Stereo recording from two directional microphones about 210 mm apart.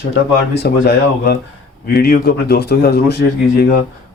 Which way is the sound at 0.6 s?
50° left (ahead or behind).